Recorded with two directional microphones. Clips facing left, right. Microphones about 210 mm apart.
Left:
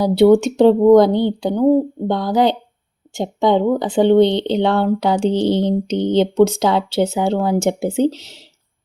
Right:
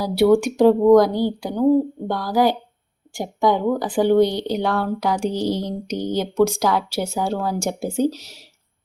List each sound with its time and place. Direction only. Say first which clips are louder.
0.0 s speech: left 4 dB; 20° left (ahead or behind)